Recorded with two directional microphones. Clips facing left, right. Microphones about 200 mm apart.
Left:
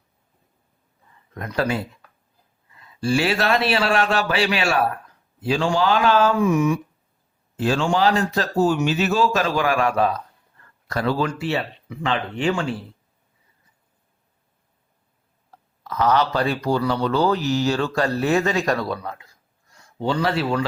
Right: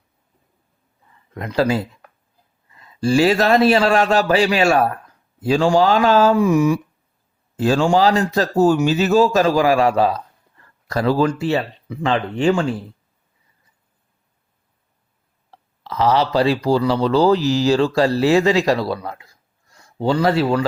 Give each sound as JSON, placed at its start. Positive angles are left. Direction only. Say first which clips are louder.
{"t": 1.3, "sound": "speech", "louder": "right 5 dB", "side_deg": -30}
{"t": 3.0, "sound": "speech", "louder": "right 6 dB", "side_deg": -40}
{"t": 15.4, "sound": "a sound", "louder": "right 2 dB", "side_deg": -30}
{"t": 16.6, "sound": "speech", "louder": "right 4 dB", "side_deg": -30}